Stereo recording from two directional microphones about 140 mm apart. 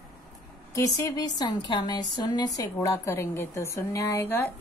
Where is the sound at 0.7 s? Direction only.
30° left (ahead or behind).